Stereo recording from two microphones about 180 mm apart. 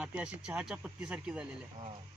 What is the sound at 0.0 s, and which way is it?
Speech, 5° right (ahead or behind).